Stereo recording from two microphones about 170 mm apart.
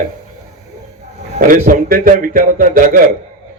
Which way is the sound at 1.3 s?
55° right (ahead or behind).